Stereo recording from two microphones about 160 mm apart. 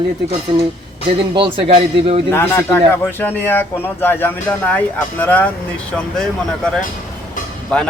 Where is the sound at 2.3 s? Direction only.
15° left (ahead or behind).